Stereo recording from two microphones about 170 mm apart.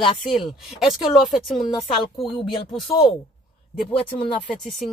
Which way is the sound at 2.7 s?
Centre (ahead or behind).